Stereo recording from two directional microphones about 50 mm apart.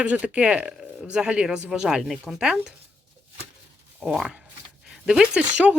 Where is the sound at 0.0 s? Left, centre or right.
Right.